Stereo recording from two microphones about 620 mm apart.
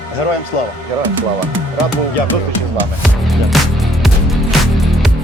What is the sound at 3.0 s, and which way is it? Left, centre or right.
Music, centre.